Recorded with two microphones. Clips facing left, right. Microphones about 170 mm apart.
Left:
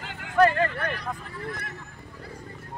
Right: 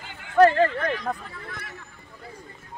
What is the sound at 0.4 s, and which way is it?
Speech, 40° right (ahead or behind).